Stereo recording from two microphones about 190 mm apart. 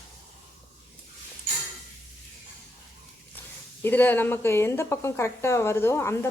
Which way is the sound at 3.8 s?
10° left (ahead or behind).